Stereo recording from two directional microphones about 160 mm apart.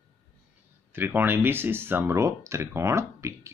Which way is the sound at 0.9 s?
15° right (ahead or behind).